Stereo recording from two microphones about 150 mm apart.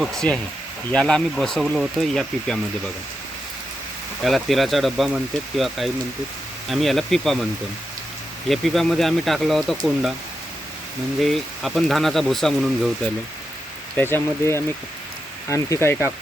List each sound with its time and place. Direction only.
0.0 s speech: 5° left (ahead or behind)
4.2 s speech: centre (ahead or behind)
8.4 s speech: centre (ahead or behind)
11.2 s speech: centre (ahead or behind)
13.9 s speech: 15° left (ahead or behind)